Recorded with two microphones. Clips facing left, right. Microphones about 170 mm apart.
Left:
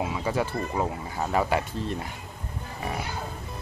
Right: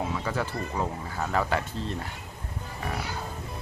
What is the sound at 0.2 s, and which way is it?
Speech, 15° left (ahead or behind).